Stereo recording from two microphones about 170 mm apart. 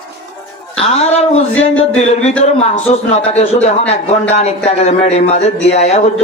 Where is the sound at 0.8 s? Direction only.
40° left (ahead or behind).